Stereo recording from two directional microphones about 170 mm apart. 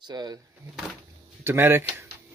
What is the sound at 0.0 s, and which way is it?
Speech, 25° right (ahead or behind).